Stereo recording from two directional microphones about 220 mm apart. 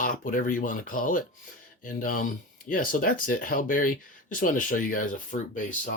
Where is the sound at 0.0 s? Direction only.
40° left (ahead or behind).